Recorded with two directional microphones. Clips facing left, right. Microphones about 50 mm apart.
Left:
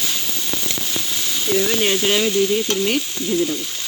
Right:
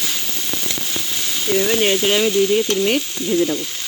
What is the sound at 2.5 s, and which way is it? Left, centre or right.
Stir, right.